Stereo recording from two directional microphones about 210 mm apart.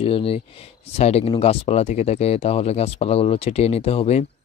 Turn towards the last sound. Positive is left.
turn(degrees=30)  # may be behind; listen again after turning